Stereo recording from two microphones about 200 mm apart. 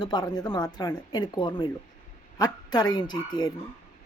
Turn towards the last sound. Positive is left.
turn(degrees=20)  # may be behind; listen again after turning